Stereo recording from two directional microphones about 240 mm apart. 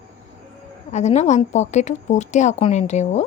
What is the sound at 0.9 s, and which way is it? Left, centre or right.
A woman's voice, left.